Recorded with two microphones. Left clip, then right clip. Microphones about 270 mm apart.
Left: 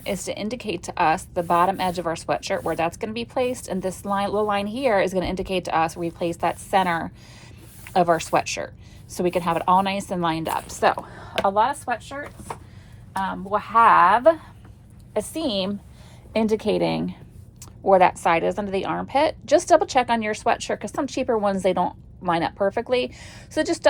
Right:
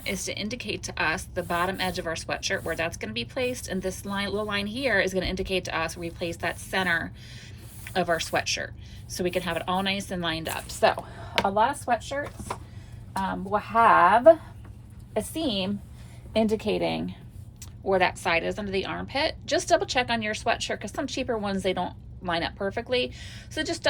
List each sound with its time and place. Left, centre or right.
0.0 s a woman's voice: centre
13.1 s a woman's voice: left
16.4 s a woman's voice: left